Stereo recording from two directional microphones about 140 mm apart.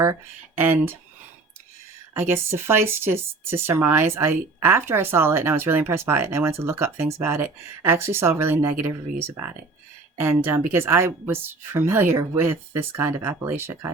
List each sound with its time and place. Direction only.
0.0 s speech: 15° right (ahead or behind)
2.1 s speech: 15° right (ahead or behind)